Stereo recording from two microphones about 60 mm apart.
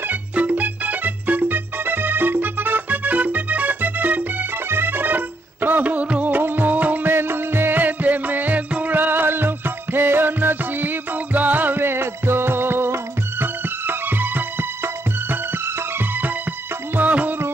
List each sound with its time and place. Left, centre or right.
0.1 s music: right
16.9 s music: right